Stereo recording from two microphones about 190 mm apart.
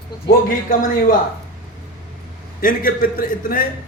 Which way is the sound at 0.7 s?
45° left (ahead or behind).